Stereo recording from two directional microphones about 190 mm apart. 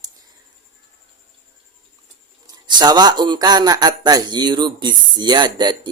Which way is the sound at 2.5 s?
20° right (ahead or behind).